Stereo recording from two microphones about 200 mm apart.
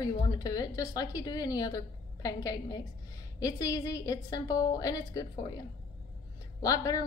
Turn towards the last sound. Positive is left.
turn(degrees=15)  # may be behind; listen again after turning